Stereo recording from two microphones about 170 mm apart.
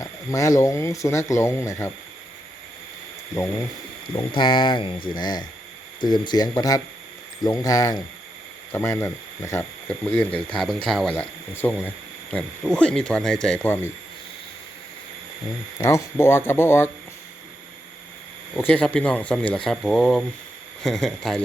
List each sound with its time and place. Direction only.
0.0 s speech: 20° left (ahead or behind)
4.1 s speech: 30° left (ahead or behind); by 11.1 s centre (ahead or behind)
11.1 s speech: 10° left (ahead or behind)
15.8 s speech: 15° left (ahead or behind)
18.5 s speech: 10° left (ahead or behind)